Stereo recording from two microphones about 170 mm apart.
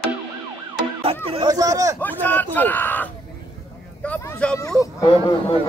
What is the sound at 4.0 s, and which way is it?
Vehicle, 10° left (ahead or behind).